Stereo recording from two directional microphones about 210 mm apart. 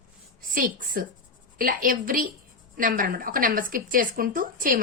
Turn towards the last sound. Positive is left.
turn(degrees=-40)  # may be behind; listen again after turning